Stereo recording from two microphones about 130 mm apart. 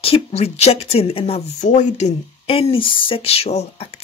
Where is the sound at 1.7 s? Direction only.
65° left (ahead or behind).